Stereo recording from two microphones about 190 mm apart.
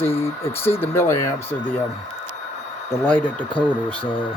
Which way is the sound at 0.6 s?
10° left (ahead or behind).